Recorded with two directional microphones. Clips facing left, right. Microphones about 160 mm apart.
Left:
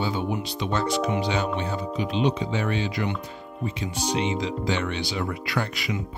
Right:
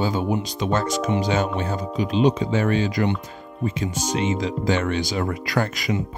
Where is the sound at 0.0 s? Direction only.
40° right (ahead or behind).